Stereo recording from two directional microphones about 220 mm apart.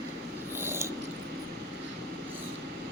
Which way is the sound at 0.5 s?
10° right (ahead or behind).